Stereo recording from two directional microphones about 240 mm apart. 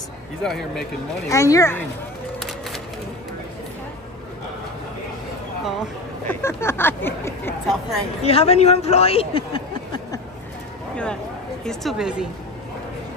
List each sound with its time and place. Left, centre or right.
0.4 s a woman's voice: centre
1.3 s speech: centre
6.2 s speech: centre
8.2 s a man's voice: left
11.6 s a woman's voice: centre